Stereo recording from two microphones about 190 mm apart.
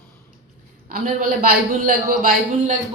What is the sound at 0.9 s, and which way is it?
A man's voice, 50° right (ahead or behind).